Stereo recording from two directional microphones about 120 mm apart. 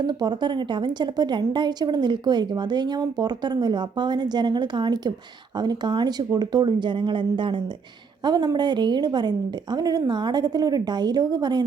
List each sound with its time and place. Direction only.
0.0 s a woman's voice: 35° right (ahead or behind)